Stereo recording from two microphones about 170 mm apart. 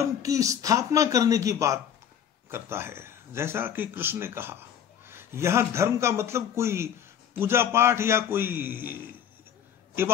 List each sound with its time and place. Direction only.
0.2 s speech: 20° right (ahead or behind)